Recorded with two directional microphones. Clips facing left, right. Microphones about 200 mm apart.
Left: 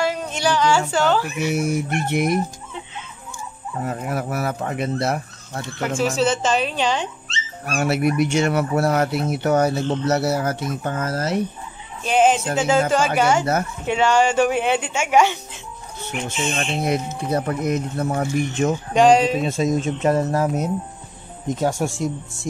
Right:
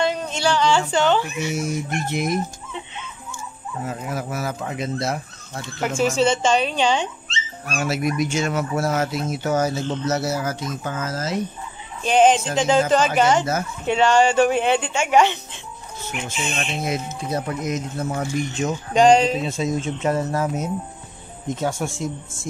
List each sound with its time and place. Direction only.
0.0 s a woman's voice: 5° left (ahead or behind)
1.4 s speech: 60° left (ahead or behind)
3.8 s speech: 55° left (ahead or behind)
5.8 s speech: 5° left (ahead or behind)
7.8 s speech: 60° left (ahead or behind)
12.0 s speech: 5° left (ahead or behind)
16.4 s speech: 30° left (ahead or behind)
17.3 s speech: 60° left (ahead or behind)
18.9 s speech: 5° left (ahead or behind)
19.4 s speech: 45° left (ahead or behind)
21.6 s speech: 40° left (ahead or behind)
21.9 s speech: 70° left (ahead or behind)